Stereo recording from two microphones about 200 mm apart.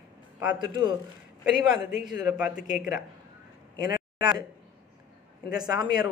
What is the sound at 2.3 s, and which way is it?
Speech, 5° right (ahead or behind).